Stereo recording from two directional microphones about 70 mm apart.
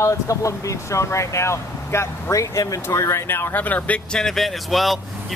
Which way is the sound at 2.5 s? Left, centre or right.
Left.